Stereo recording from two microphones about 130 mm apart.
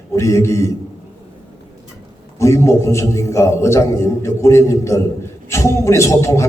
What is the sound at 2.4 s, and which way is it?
A man's voice, 20° left (ahead or behind).